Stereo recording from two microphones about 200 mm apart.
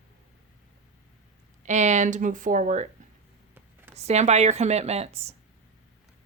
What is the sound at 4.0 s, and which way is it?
A woman's voice, 35° right (ahead or behind).